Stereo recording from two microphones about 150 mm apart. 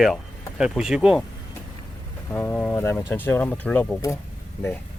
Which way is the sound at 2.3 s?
15° left (ahead or behind).